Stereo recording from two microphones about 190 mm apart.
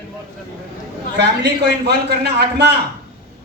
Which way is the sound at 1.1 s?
60° right (ahead or behind).